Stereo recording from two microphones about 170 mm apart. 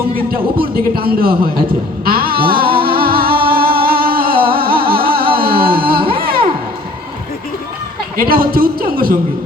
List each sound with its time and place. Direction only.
0.6 s speech: 60° right (ahead or behind)
2.0 s music: 60° right (ahead or behind)
8.3 s speech: 60° right (ahead or behind)